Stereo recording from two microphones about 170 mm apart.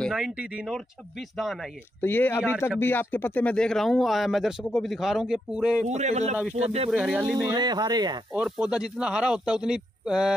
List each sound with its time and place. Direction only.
0.1 s speech: 5° right (ahead or behind)
2.0 s speech: 10° left (ahead or behind)
5.9 s speech: 40° right (ahead or behind)
6.3 s speech: 5° right (ahead or behind)
7.4 s speech: 25° right (ahead or behind)
8.3 s speech: 5° right (ahead or behind)